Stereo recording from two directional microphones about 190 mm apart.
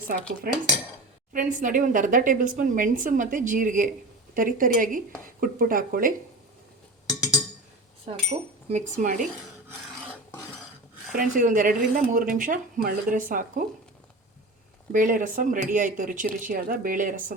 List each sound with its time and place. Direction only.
0.1 s a woman's voice: 50° right (ahead or behind)
1.3 s a woman's voice: 40° right (ahead or behind)
8.1 s speech: 30° right (ahead or behind)
11.1 s a woman's voice: 45° right (ahead or behind)
14.9 s a woman's voice: 45° right (ahead or behind)